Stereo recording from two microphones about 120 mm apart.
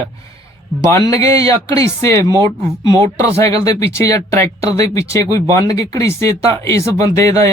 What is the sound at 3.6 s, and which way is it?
Speech, 25° left (ahead or behind).